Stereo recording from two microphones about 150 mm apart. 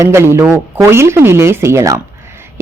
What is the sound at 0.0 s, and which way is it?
A woman's voice, 15° right (ahead or behind).